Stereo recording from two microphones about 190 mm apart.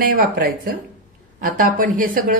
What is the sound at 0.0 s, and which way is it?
A man's voice, 50° right (ahead or behind).